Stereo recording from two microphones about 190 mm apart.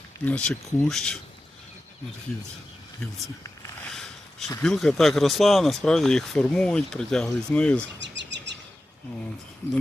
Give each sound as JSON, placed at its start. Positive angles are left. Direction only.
{"t": 0.3, "sound": "speech", "side_deg": 5}
{"t": 3.9, "sound": "a sound", "side_deg": 0}
{"t": 4.6, "sound": "speech", "side_deg": 5}
{"t": 7.9, "sound": "bird vocalization", "side_deg": -70}